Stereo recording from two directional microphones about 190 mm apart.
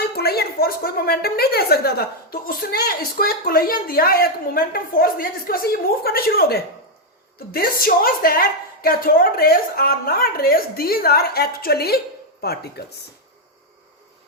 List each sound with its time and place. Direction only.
0.1 s a woman's voice: 55° left (ahead or behind)